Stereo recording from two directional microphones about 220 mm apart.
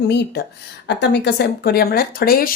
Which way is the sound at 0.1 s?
50° left (ahead or behind).